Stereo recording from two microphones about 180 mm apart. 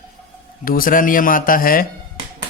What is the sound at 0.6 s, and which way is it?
A man's voice, 50° left (ahead or behind).